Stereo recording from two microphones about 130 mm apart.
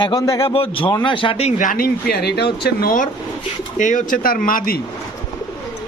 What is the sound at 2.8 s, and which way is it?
Speech, 90° left.